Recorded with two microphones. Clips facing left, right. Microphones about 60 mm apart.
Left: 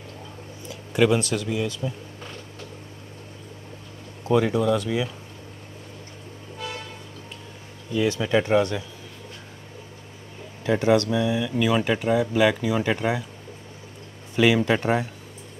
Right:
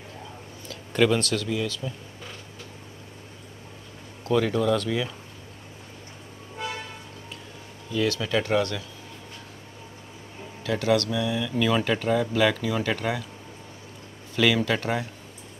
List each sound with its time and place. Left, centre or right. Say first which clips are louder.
0.7 s speech: left 2 dB; centre
4.2 s speech: left 2 dB; centre
7.9 s speech: left 3 dB; centre
10.6 s speech: left 4 dB; left
14.3 s speech: left 3 dB; centre